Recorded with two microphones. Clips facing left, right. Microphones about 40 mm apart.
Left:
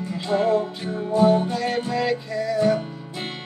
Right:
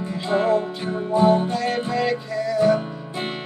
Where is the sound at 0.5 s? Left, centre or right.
Centre.